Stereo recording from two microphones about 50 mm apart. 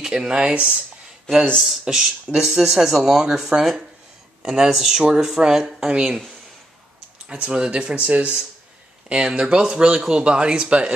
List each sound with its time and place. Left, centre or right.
0.0 s speech: centre
1.6 s speech: centre
7.2 s speech: right
9.1 s speech: centre